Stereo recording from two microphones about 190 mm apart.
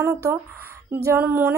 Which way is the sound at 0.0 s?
15° right (ahead or behind).